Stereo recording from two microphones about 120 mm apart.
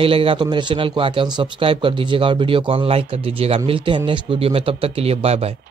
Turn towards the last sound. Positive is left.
turn(degrees=-60)  # may be behind; listen again after turning